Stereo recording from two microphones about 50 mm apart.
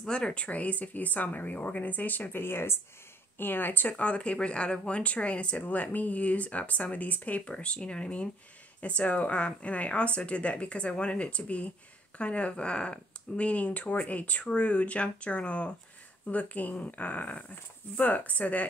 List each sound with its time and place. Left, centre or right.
0.0 s speech: centre; by 3.9 s left
3.9 s speech: left